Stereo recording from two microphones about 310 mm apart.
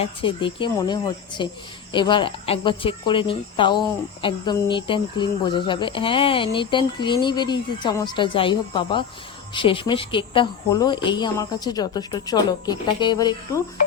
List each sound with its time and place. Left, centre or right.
0.0 s speech: centre